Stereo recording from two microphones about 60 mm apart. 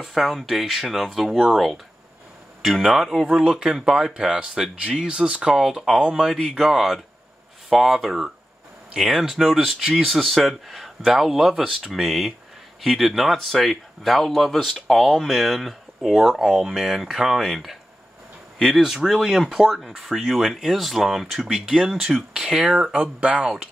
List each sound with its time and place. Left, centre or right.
0.0 s speech: centre
22.9 s speech: right
23.4 s speech: centre